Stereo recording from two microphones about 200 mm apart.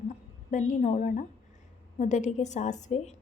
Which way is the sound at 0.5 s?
35° left (ahead or behind).